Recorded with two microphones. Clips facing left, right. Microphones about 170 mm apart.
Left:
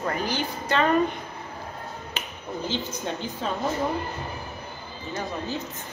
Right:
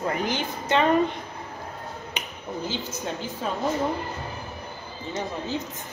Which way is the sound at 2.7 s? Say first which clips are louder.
Left 3 dB; 10° right (ahead or behind).